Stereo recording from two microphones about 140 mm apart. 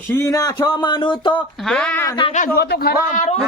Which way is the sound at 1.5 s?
5° left (ahead or behind).